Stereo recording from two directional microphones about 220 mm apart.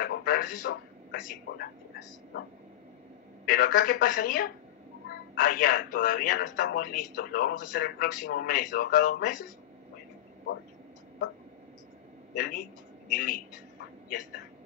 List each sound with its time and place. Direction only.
0.0 s a sound: 40° left (ahead or behind)
3.4 s speech: 40° left (ahead or behind)
12.4 s speech: 40° left (ahead or behind)